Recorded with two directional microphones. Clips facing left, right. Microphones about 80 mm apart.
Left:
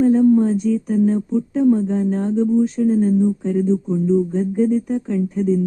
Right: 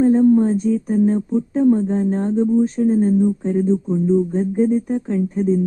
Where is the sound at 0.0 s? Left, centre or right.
Right.